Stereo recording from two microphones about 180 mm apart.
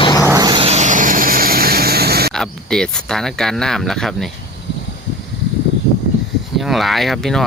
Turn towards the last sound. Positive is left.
turn(degrees=0)  # may be behind; listen again after turning